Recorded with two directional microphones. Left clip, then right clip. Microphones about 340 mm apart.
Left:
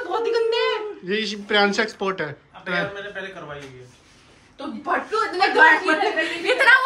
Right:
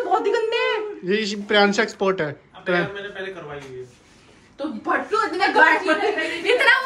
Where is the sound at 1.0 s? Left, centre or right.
Centre.